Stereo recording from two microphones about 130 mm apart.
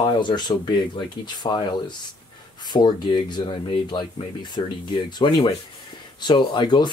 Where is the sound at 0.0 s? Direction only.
35° left (ahead or behind).